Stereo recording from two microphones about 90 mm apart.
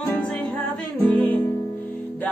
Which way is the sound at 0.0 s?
15° left (ahead or behind).